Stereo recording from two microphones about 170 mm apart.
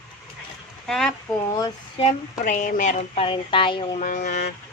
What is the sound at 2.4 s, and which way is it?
Speech, 50° left (ahead or behind).